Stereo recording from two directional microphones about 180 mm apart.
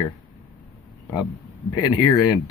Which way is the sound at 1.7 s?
25° left (ahead or behind).